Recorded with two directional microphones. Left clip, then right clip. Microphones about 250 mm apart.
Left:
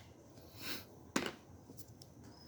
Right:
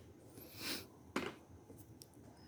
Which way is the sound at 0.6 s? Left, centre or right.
Centre.